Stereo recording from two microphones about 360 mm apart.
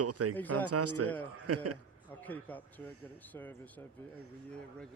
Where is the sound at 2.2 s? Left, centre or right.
Centre.